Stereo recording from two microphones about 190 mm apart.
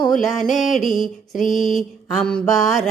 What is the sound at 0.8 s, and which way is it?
Mantra, 40° left (ahead or behind).